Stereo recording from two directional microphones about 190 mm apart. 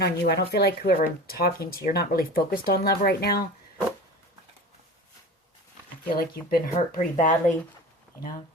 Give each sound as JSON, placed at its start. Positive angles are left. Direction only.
{"t": 0.0, "sound": "speech", "side_deg": 60}
{"t": 6.1, "sound": "speech", "side_deg": 50}